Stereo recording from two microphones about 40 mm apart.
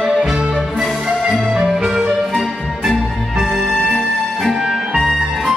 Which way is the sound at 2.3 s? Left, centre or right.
Centre.